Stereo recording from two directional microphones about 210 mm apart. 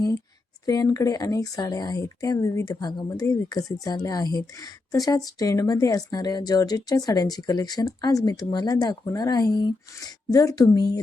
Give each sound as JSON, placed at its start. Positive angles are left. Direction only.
{"t": 0.6, "sound": "speech", "side_deg": 20}